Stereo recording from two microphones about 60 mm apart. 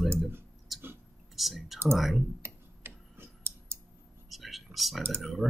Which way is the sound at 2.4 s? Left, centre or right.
Right.